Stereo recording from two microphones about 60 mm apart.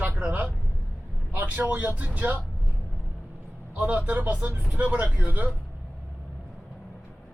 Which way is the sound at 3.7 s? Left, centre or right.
Right.